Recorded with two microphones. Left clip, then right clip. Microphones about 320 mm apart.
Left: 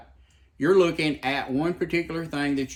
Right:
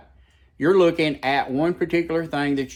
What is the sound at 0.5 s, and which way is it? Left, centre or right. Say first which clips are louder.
Speech: right 3 dB; centre.